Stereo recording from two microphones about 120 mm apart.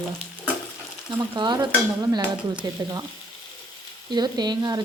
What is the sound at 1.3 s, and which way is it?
Stir, 40° right (ahead or behind).